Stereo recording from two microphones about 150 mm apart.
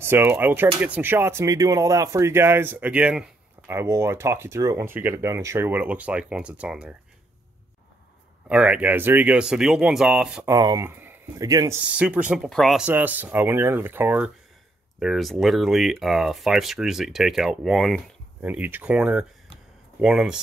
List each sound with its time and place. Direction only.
0.0 s speech: 15° right (ahead or behind)
3.7 s speech: 20° right (ahead or behind)
8.5 s speech: 10° right (ahead or behind)
10.4 s speech: 25° right (ahead or behind)
10.9 s speech: 15° right (ahead or behind)
11.9 s speech: 10° right (ahead or behind)
12.4 s speech: centre (ahead or behind)
12.8 s speech: 10° right (ahead or behind)
15.0 s speech: centre (ahead or behind)